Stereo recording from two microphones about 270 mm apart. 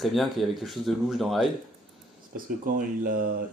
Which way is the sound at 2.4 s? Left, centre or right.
Right.